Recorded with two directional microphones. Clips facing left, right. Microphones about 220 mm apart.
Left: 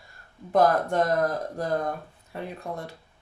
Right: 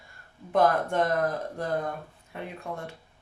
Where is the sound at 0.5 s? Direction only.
40° left (ahead or behind).